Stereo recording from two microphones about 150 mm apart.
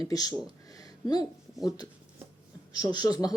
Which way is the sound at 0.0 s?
25° left (ahead or behind).